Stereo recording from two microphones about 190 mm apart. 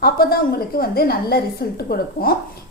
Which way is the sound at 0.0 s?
55° left (ahead or behind).